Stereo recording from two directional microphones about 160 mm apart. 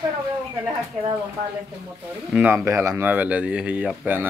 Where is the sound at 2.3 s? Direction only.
5° right (ahead or behind).